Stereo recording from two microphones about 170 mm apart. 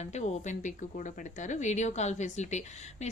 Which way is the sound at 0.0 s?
40° left (ahead or behind).